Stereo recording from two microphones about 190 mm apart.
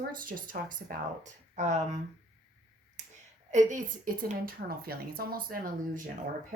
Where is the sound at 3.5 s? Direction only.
40° right (ahead or behind).